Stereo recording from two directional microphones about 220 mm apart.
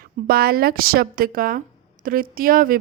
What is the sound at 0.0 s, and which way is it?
A woman's voice, 45° right (ahead or behind).